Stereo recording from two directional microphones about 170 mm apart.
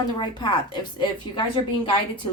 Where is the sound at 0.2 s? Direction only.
25° left (ahead or behind).